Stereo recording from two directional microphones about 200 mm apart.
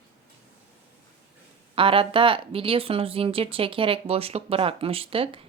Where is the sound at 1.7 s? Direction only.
25° right (ahead or behind).